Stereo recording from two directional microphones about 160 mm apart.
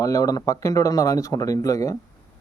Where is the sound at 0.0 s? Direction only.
20° left (ahead or behind).